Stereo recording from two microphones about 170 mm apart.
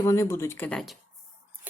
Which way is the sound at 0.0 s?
15° left (ahead or behind).